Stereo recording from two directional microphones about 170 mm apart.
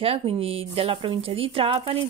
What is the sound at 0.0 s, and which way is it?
Speech, 35° right (ahead or behind).